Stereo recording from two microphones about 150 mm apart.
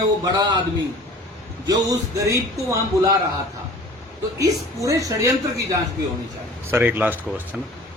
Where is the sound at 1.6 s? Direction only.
25° right (ahead or behind).